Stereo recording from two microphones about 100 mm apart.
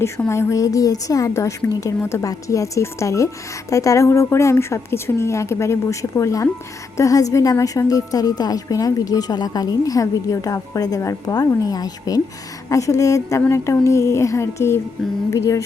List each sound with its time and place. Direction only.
0.3 s a woman's voice: 30° left (ahead or behind)